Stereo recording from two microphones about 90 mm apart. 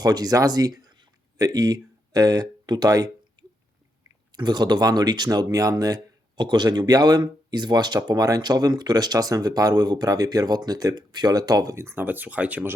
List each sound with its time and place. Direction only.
0.0 s speech: 45° right (ahead or behind)
3.4 s a sound: 45° right (ahead or behind)
4.3 s speech: 50° right (ahead or behind); by 12.7 s 15° right (ahead or behind)